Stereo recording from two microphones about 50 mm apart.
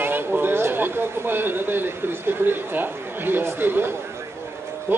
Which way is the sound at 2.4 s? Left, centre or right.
Right.